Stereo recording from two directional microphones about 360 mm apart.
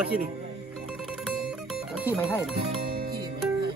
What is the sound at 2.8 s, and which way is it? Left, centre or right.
Music, centre.